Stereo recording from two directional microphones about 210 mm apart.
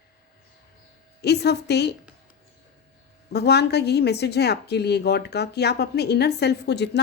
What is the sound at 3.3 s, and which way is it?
Speech, 50° left (ahead or behind).